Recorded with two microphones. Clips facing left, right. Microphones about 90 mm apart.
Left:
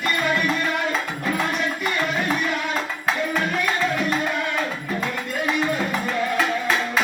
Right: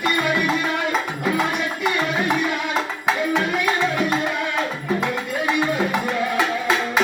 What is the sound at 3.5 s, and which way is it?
Music, 10° right (ahead or behind).